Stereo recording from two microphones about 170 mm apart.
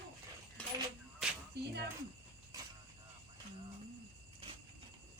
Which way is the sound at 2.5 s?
20° right (ahead or behind).